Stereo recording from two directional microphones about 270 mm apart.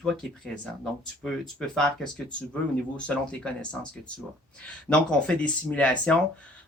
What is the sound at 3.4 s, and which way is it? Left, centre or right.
Speech, centre.